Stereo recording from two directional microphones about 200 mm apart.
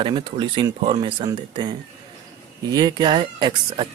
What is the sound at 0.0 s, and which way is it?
A man's voice, 25° right (ahead or behind).